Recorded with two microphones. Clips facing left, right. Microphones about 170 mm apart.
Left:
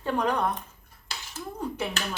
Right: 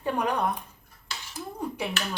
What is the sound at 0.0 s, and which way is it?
Speech, 10° right (ahead or behind).